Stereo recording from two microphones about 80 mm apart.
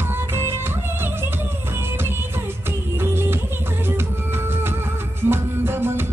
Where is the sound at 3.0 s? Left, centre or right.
Right.